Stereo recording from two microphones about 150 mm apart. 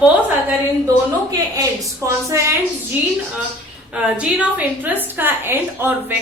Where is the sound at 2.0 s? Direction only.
20° right (ahead or behind).